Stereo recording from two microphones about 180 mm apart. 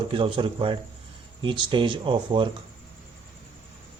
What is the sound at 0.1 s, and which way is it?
Speech, 30° right (ahead or behind).